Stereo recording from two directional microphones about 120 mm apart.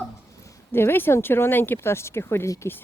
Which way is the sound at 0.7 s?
20° left (ahead or behind).